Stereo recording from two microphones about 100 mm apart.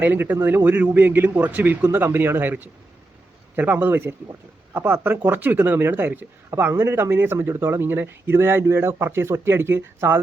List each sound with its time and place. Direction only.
0.0 s speech: 20° right (ahead or behind)